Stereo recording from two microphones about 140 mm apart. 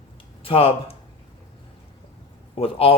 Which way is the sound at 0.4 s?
45° left (ahead or behind).